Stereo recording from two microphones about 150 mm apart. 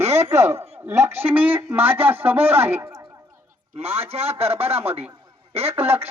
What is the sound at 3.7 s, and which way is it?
A man's voice, 40° right (ahead or behind).